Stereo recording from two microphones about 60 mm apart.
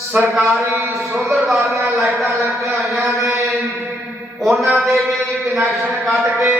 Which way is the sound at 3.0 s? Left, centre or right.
Right.